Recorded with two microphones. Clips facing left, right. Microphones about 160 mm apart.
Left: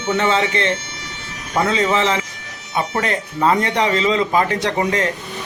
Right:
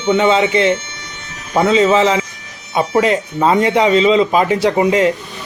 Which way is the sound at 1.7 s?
30° right (ahead or behind).